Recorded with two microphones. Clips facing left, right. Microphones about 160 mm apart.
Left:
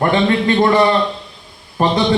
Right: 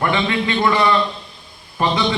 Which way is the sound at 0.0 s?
45° left (ahead or behind).